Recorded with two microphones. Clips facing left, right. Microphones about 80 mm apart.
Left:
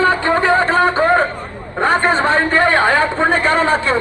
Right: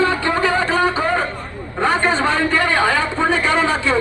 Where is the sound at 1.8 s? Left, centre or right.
Left.